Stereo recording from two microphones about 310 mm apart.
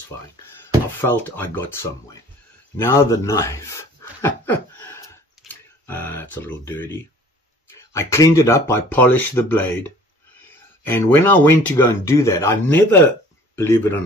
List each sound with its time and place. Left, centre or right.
1.0 s speech: centre
10.9 s speech: centre